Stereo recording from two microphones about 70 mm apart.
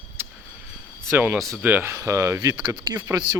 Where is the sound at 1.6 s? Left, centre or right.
Right.